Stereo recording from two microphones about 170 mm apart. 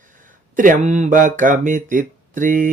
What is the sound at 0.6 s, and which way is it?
Speech, 50° right (ahead or behind).